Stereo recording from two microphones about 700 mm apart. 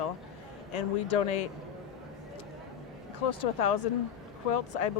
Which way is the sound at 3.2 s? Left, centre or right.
Left.